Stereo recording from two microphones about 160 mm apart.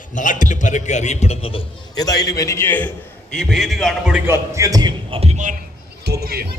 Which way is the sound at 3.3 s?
Centre (ahead or behind).